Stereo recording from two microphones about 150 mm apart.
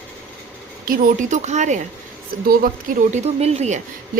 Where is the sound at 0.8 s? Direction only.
65° right (ahead or behind).